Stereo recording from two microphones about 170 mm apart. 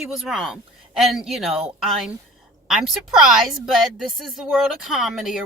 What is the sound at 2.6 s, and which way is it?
A child's voice, centre (ahead or behind).